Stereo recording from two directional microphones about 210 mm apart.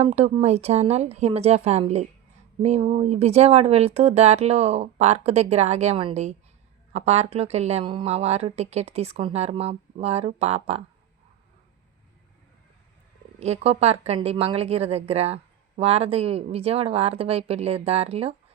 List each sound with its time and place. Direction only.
0.0 s a woman's voice: 30° right (ahead or behind)
13.4 s a woman's voice: 30° right (ahead or behind)